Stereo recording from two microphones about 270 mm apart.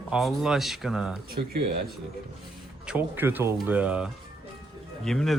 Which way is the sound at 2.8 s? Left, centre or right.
Centre.